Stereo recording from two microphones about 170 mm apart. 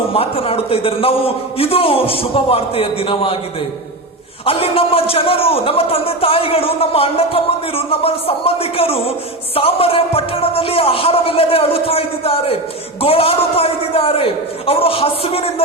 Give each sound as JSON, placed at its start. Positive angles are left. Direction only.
{"t": 0.1, "sound": "a man's voice", "side_deg": 35}
{"t": 4.4, "sound": "a man's voice", "side_deg": 35}